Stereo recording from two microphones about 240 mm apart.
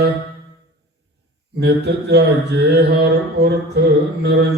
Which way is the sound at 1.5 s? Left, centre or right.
Right.